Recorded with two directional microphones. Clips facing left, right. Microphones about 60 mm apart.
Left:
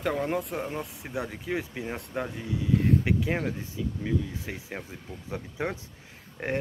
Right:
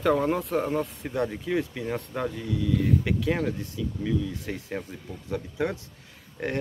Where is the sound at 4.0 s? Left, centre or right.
Left.